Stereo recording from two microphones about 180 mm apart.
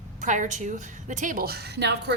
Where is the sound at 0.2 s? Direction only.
45° right (ahead or behind).